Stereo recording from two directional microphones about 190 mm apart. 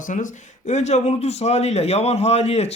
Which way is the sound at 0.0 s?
40° left (ahead or behind).